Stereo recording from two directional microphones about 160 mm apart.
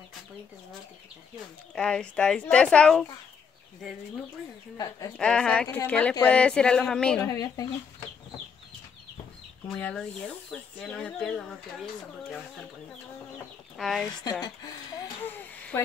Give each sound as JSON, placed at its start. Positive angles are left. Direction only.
{"t": 1.8, "sound": "speech", "side_deg": 5}
{"t": 4.7, "sound": "speech", "side_deg": 20}
{"t": 5.1, "sound": "speech", "side_deg": 5}
{"t": 7.2, "sound": "speech", "side_deg": 25}
{"t": 9.7, "sound": "speech", "side_deg": 5}
{"t": 13.7, "sound": "speech", "side_deg": 0}
{"t": 14.4, "sound": "speech", "side_deg": 25}
{"t": 15.2, "sound": "a sound", "side_deg": 10}